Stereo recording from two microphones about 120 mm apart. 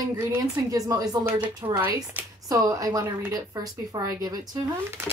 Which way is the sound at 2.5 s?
30° right (ahead or behind).